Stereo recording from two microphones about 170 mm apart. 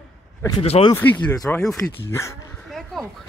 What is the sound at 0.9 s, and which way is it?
Speech, 10° left (ahead or behind).